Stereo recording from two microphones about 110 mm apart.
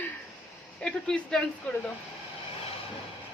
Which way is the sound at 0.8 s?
5° left (ahead or behind).